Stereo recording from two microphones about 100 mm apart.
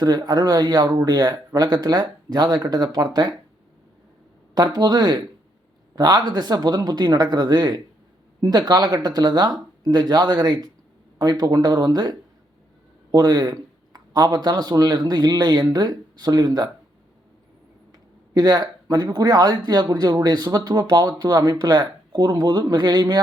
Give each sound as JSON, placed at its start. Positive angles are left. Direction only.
{"t": 0.0, "sound": "speech", "side_deg": -45}
{"t": 4.5, "sound": "speech", "side_deg": -45}
{"t": 18.3, "sound": "speech", "side_deg": -45}